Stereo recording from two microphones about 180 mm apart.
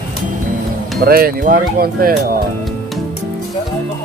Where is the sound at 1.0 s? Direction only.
55° right (ahead or behind).